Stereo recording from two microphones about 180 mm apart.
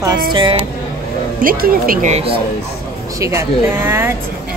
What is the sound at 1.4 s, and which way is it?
Speech, 55° right (ahead or behind).